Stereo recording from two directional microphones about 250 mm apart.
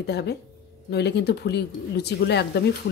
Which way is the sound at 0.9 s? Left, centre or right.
Left.